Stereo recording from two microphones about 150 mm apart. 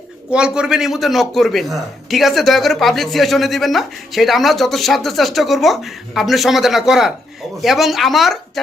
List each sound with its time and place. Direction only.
0.3 s a man's voice: 5° right (ahead or behind)